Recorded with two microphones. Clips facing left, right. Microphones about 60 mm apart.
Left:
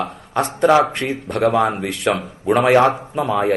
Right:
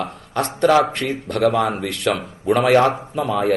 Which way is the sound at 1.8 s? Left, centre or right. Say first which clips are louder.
Left 1 dB; centre.